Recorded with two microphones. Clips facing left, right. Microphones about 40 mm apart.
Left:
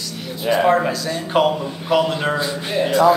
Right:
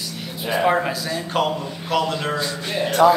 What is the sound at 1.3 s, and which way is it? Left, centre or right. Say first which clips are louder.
Speech: left 6 dB; centre.